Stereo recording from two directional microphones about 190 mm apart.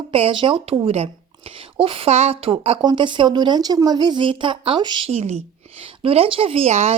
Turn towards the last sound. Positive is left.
turn(degrees=-35)  # may be behind; listen again after turning